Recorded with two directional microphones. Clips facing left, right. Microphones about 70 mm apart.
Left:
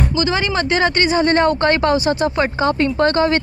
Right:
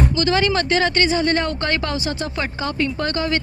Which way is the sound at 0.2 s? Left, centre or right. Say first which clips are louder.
Left 1 dB; centre.